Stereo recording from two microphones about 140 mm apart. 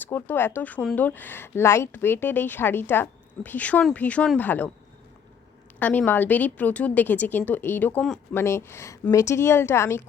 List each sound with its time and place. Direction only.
0.0 s speech: 15° left (ahead or behind)
5.8 s speech: 10° left (ahead or behind)